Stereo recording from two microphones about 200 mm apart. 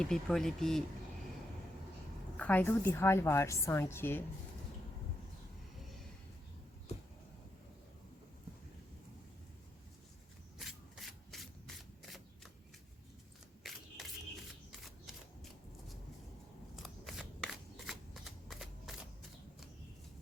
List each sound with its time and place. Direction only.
0.0 s speech: centre (ahead or behind)
2.4 s a woman's voice: 10° left (ahead or behind)
10.6 s shuffling cards: centre (ahead or behind)
13.6 s single-lens reflex camera: centre (ahead or behind)
16.7 s shuffling cards: centre (ahead or behind)